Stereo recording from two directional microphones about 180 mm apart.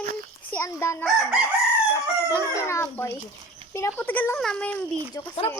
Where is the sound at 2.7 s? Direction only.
15° left (ahead or behind).